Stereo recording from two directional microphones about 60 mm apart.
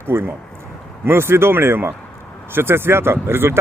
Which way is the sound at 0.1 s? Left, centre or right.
Right.